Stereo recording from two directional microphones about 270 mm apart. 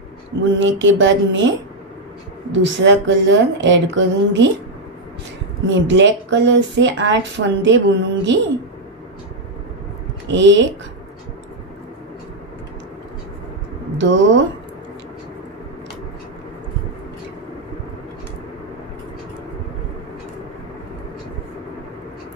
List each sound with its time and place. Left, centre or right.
0.4 s speech: right
2.7 s speech: right
5.9 s speech: right
10.3 s speech: right
13.9 s speech: right